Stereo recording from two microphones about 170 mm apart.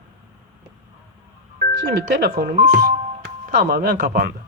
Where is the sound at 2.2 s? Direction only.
60° right (ahead or behind).